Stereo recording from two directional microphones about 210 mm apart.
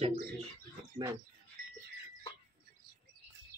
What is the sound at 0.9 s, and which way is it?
Speech, 15° right (ahead or behind).